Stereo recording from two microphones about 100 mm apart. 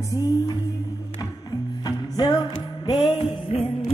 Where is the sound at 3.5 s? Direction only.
75° left (ahead or behind).